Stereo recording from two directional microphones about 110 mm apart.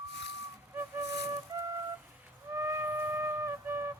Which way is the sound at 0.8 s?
20° right (ahead or behind).